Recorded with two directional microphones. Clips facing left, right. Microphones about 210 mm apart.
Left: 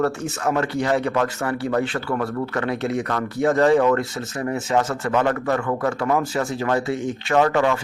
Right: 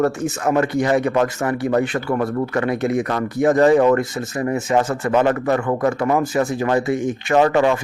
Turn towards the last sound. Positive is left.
turn(degrees=-15)  # may be behind; listen again after turning